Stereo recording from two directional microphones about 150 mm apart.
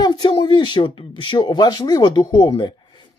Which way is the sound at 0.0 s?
30° left (ahead or behind).